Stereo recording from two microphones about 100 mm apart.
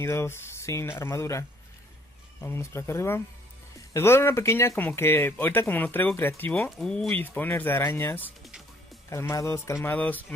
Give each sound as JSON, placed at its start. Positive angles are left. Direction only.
{"t": 0.0, "sound": "speech", "side_deg": 25}
{"t": 2.4, "sound": "speech", "side_deg": 25}
{"t": 6.8, "sound": "speech", "side_deg": 5}
{"t": 7.1, "sound": "speech", "side_deg": 20}
{"t": 8.2, "sound": "typing", "side_deg": -5}
{"t": 9.1, "sound": "speech", "side_deg": 30}
{"t": 9.9, "sound": "speech", "side_deg": 15}